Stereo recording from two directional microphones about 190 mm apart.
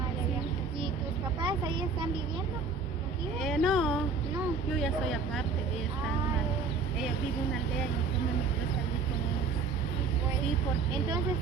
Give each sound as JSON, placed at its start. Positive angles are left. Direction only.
{"t": 1.4, "sound": "vehicle", "side_deg": -25}
{"t": 3.4, "sound": "speech", "side_deg": 0}